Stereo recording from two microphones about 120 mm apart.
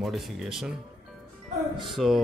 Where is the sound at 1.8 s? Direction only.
Centre (ahead or behind).